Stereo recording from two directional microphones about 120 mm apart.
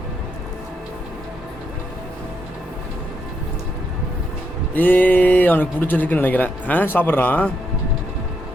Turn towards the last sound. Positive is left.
turn(degrees=15)  # may be behind; listen again after turning